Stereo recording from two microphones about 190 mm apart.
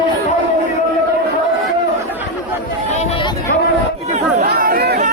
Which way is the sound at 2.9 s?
35° left (ahead or behind).